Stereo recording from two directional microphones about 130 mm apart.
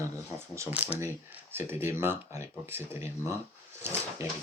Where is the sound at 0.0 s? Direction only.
20° right (ahead or behind).